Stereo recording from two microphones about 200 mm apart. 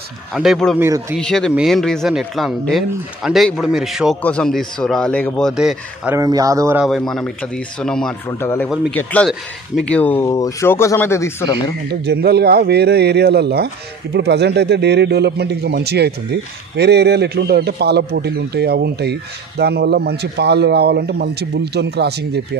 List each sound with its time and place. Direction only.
0.3 s speech: centre (ahead or behind)
0.7 s speech: 15° right (ahead or behind)
1.2 s speech: 5° left (ahead or behind)
6.1 s speech: 15° right (ahead or behind)
6.8 s speech: centre (ahead or behind)
11.9 s speech: 55° right (ahead or behind)